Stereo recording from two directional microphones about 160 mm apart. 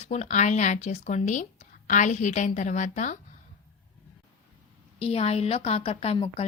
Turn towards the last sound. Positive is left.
turn(degrees=40)  # may be behind; listen again after turning